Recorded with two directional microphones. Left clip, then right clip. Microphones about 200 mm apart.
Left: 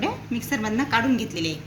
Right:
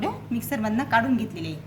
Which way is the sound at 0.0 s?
55° right (ahead or behind).